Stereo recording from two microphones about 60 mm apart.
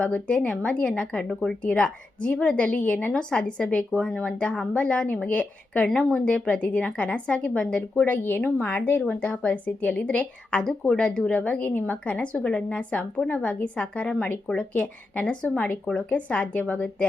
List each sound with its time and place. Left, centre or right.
0.1 s a woman's voice: centre
4.0 s a woman's voice: centre
7.8 s a woman's voice: left
8.2 s a woman's voice: left